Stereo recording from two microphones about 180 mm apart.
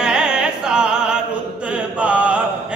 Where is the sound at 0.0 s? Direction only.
5° right (ahead or behind).